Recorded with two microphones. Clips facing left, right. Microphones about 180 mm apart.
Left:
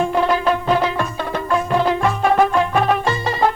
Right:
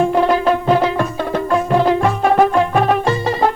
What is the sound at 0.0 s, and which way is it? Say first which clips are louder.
Music: right 3 dB; 40° right (ahead or behind).